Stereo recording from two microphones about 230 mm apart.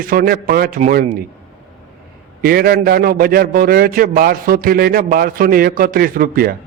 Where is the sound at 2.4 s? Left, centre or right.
Right.